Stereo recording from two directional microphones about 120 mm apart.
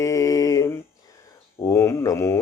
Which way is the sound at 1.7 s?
20° left (ahead or behind).